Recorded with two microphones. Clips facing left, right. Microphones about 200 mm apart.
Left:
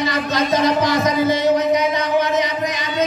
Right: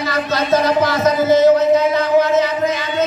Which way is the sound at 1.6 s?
15° left (ahead or behind).